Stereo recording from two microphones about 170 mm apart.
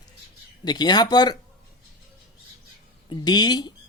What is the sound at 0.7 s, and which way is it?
Speech, 25° left (ahead or behind).